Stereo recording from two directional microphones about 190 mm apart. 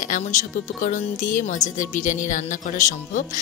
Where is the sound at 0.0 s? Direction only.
40° left (ahead or behind).